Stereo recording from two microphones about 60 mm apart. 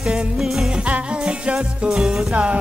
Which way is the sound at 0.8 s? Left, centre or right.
Centre.